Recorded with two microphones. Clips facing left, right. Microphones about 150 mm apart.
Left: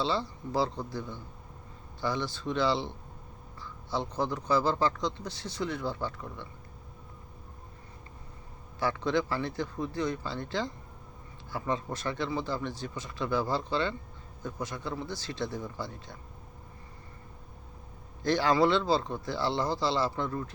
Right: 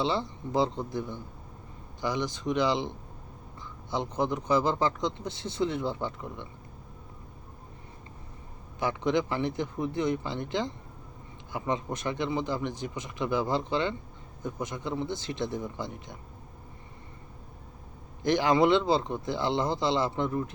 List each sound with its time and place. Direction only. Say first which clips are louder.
0.0 s a man's voice: right 2 dB; 20° right (ahead or behind)
3.9 s a man's voice: right 2 dB; 20° right (ahead or behind)
8.8 s a man's voice: right 2 dB; 20° right (ahead or behind)
18.2 s a man's voice: right 2 dB; 20° right (ahead or behind)